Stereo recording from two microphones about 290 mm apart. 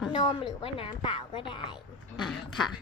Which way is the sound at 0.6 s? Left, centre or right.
Centre.